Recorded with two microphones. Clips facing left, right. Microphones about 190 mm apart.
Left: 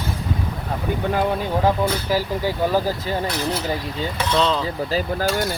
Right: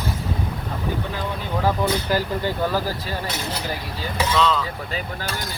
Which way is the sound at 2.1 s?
10° left (ahead or behind).